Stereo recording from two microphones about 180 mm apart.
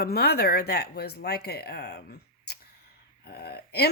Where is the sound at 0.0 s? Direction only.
60° left (ahead or behind).